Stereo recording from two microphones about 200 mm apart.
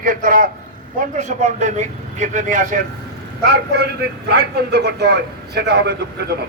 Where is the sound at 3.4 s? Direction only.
55° right (ahead or behind).